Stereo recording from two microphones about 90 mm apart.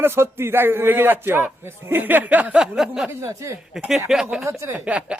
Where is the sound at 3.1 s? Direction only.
35° right (ahead or behind).